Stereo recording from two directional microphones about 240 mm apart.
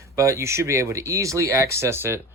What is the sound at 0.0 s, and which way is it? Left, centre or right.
Speech, centre.